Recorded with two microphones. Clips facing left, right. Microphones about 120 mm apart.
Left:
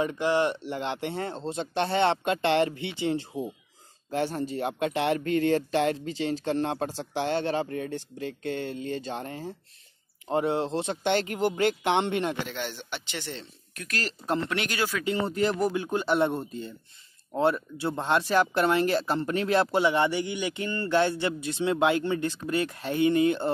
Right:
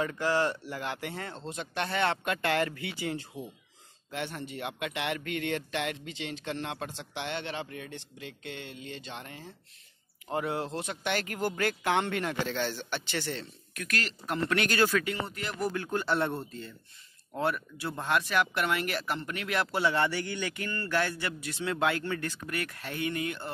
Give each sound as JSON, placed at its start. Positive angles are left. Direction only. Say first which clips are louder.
{"t": 0.0, "sound": "speech", "louder": "left 3 dB", "side_deg": 20}
{"t": 10.2, "sound": "speech", "louder": "left 6 dB", "side_deg": 25}
{"t": 15.0, "sound": "speech", "louder": "left 9 dB", "side_deg": 30}
{"t": 19.8, "sound": "speech", "louder": "left 4 dB", "side_deg": 20}